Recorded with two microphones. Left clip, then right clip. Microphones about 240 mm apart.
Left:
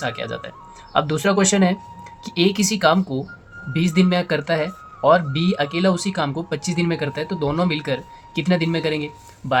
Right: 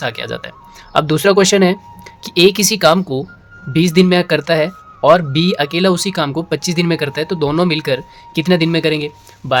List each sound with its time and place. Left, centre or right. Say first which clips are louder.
0.0 s speech: right 4 dB; right